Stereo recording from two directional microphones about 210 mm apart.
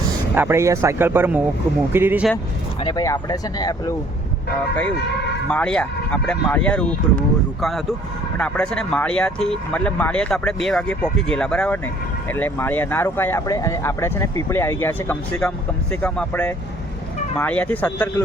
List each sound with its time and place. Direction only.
0.3 s speech: 10° right (ahead or behind)
2.8 s speech: 15° left (ahead or behind)
5.5 s speech: 5° left (ahead or behind)